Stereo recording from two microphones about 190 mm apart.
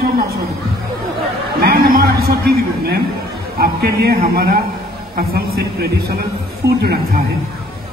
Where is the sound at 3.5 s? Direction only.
55° right (ahead or behind).